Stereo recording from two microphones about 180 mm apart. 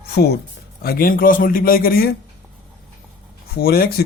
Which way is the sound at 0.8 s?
55° left (ahead or behind).